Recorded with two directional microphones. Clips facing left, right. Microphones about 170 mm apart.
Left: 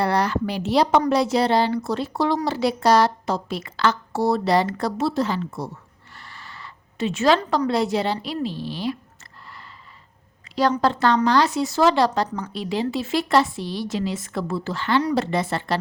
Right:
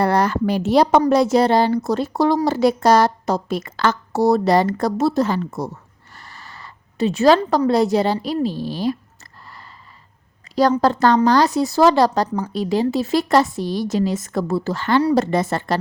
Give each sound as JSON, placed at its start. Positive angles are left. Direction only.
{"t": 0.0, "sound": "a woman's voice", "side_deg": -45}
{"t": 10.5, "sound": "speech", "side_deg": -40}